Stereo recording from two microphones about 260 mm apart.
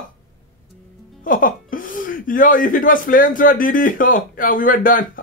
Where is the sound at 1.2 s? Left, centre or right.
Left.